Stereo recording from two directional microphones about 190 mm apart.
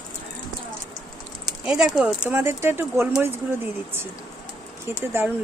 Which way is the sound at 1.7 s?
5° right (ahead or behind).